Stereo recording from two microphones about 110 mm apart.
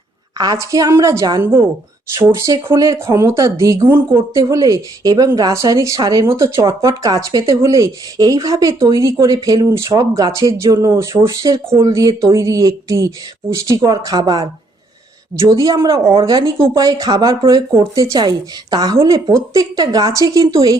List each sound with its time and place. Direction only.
0.3 s speech: 35° right (ahead or behind)